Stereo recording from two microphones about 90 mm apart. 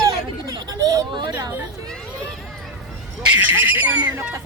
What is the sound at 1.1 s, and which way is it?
Speech, 55° right (ahead or behind).